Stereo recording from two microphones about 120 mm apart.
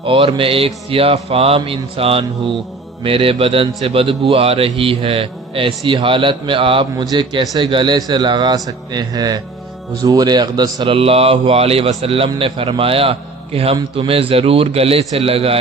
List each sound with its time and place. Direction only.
0.0 s speech: 50° right (ahead or behind); by 10.9 s 35° right (ahead or behind)
10.9 s speech: 55° right (ahead or behind)